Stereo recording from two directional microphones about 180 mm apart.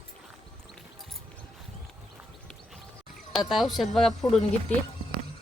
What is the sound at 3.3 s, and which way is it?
Speech, centre (ahead or behind).